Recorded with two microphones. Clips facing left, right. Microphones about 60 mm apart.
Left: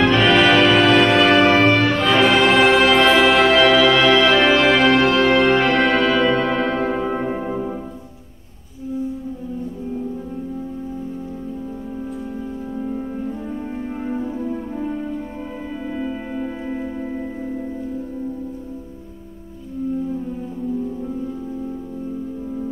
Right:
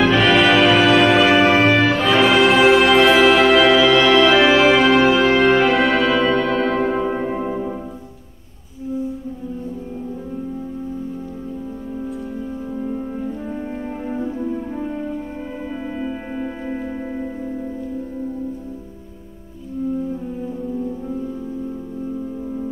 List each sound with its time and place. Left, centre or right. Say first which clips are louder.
0.0 s music: even; centre
12.7 s music: even; centre
16.0 s music: left 1 dB; centre